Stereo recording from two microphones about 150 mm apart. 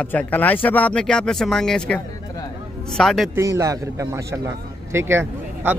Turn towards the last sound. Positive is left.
turn(degrees=-15)  # may be behind; listen again after turning